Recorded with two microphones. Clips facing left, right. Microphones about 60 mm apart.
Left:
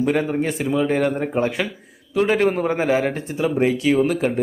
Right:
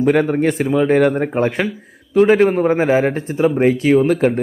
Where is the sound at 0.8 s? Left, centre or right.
Right.